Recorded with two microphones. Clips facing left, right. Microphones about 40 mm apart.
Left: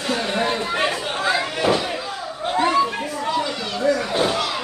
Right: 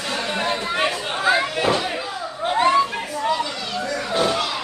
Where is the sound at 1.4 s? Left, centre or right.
Centre.